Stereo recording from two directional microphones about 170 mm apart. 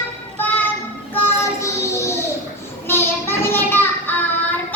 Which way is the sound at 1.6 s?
15° left (ahead or behind).